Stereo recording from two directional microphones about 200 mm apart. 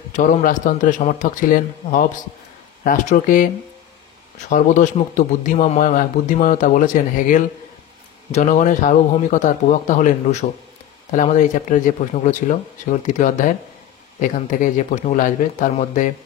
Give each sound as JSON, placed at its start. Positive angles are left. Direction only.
{"t": 0.1, "sound": "speech", "side_deg": 40}
{"t": 4.5, "sound": "speech", "side_deg": 40}